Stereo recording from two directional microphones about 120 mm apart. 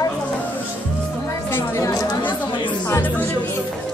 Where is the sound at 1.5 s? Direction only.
25° left (ahead or behind).